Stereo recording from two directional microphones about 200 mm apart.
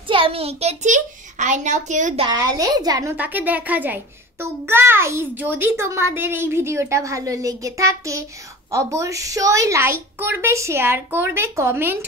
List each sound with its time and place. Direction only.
0.1 s a child's voice: 25° right (ahead or behind)
2.2 s a woman's voice: 20° right (ahead or behind)